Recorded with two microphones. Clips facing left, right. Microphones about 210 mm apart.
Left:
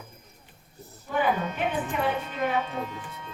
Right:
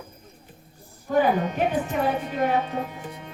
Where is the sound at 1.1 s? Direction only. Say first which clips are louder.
Right 5 dB; 40° right (ahead or behind).